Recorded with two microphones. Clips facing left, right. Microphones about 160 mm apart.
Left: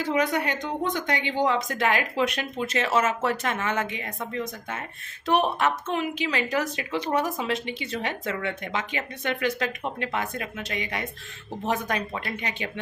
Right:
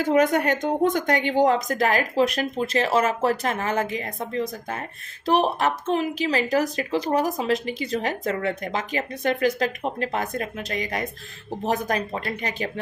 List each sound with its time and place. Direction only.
0.0 s speech: 45° right (ahead or behind)